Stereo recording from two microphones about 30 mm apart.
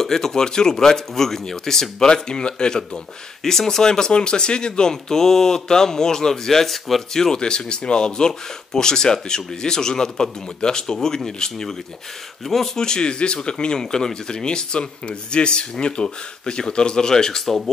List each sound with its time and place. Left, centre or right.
0.0 s speech: centre
2.2 s speech: left
3.4 s speech: centre
5.1 s speech: centre
7.3 s speech: left
12.4 s speech: centre
12.7 s speech: left
13.7 s speech: left